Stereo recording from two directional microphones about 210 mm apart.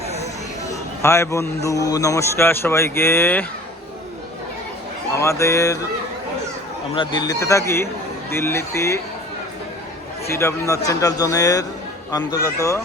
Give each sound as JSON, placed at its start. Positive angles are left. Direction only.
{"t": 0.6, "sound": "a man's voice", "side_deg": 15}
{"t": 5.1, "sound": "a man's voice", "side_deg": 15}
{"t": 6.9, "sound": "a man's voice", "side_deg": 20}
{"t": 10.3, "sound": "a man's voice", "side_deg": 15}